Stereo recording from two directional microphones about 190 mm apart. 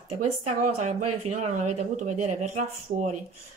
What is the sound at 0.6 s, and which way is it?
Speech, 40° right (ahead or behind).